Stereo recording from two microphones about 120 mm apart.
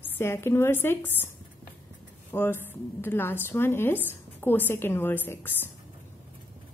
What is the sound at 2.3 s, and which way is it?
A woman's voice, 20° left (ahead or behind).